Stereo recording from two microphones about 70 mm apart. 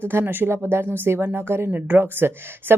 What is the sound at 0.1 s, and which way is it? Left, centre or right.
Speech, right.